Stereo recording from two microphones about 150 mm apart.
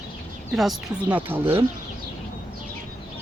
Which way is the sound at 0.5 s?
Centre (ahead or behind).